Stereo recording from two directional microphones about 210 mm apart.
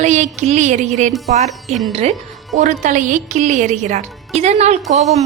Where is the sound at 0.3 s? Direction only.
35° right (ahead or behind).